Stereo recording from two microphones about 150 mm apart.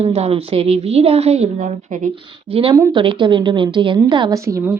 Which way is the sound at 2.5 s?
35° right (ahead or behind).